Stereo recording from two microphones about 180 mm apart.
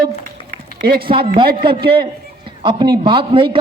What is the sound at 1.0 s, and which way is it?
Speech, 30° right (ahead or behind).